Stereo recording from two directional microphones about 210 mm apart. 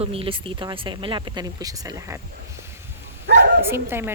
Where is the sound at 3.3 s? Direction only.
55° right (ahead or behind).